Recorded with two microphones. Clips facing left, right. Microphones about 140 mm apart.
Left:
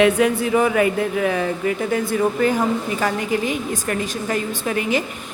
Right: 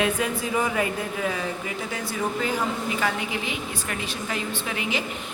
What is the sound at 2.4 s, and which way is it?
A woman's voice, 45° left (ahead or behind).